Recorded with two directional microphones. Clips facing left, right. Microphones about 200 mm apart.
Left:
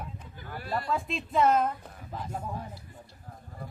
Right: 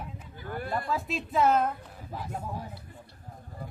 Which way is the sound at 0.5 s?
50° right (ahead or behind).